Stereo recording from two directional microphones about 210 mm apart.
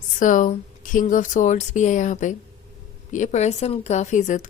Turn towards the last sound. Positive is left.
turn(degrees=35)  # may be behind; listen again after turning